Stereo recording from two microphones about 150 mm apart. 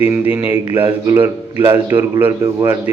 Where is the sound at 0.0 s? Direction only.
15° right (ahead or behind).